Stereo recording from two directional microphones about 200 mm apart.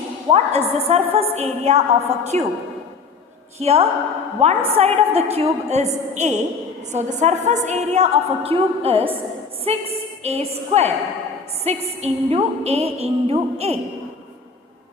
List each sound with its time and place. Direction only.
0.3 s a woman's voice: 30° right (ahead or behind)
3.6 s a woman's voice: 30° right (ahead or behind)